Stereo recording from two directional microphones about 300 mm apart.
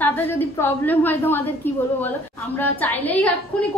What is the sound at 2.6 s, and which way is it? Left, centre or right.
A woman's voice, centre.